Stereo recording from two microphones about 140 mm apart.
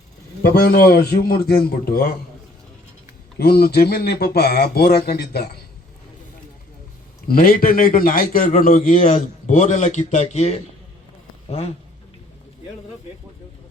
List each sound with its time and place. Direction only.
0.5 s speech: 90° left
3.3 s speech: 90° left
7.3 s a man's voice: 90° left; by 11.7 s 45° left (ahead or behind)